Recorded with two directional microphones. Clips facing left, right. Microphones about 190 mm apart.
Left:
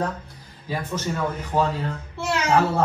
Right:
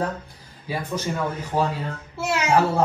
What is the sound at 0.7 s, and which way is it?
Speech, 10° right (ahead or behind).